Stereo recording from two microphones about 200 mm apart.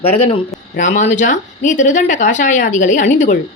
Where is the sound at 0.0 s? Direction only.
30° left (ahead or behind).